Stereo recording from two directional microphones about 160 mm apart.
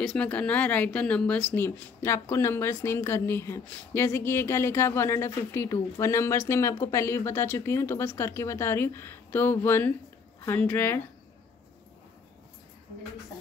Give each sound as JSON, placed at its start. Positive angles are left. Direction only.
{"t": 0.0, "sound": "speech", "side_deg": 5}